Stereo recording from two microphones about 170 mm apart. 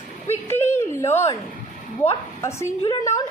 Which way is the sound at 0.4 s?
15° left (ahead or behind).